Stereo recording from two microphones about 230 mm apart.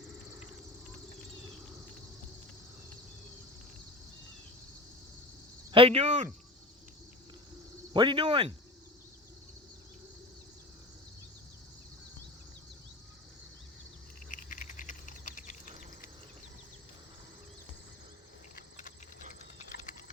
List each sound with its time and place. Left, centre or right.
5.7 s speech: right
7.9 s speech: right
14.3 s a sound: left
18.5 s vehicle: left